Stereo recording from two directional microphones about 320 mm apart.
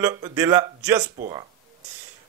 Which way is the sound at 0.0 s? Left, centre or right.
Centre.